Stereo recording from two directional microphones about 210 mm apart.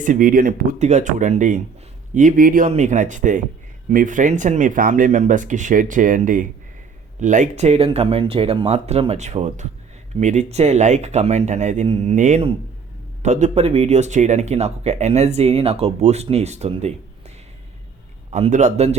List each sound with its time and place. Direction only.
0.0 s speech: 40° right (ahead or behind)